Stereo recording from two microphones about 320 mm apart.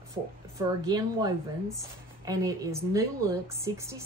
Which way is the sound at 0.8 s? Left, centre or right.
Centre.